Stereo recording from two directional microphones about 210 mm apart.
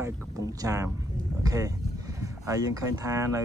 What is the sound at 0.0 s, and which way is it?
Speech, 15° right (ahead or behind).